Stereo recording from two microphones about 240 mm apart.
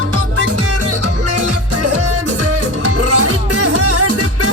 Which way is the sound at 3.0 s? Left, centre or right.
Right.